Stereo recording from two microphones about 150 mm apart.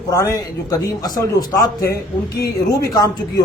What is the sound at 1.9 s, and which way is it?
Speech, 90° left.